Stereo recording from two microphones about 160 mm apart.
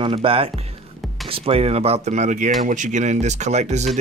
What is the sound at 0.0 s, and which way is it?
Speech, 35° right (ahead or behind).